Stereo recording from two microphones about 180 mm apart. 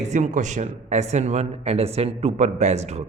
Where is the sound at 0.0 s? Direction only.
40° right (ahead or behind).